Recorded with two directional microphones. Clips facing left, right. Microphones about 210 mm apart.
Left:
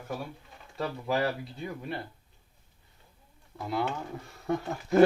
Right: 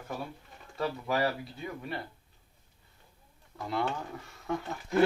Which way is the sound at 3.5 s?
10° left (ahead or behind).